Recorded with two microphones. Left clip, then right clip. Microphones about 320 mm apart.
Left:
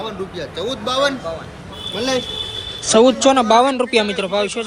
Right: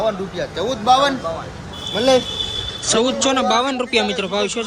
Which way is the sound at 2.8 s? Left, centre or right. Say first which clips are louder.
Left 6 dB; centre.